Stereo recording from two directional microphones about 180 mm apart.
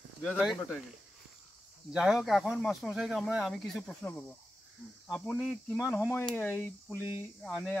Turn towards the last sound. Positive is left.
turn(degrees=0)  # may be behind; listen again after turning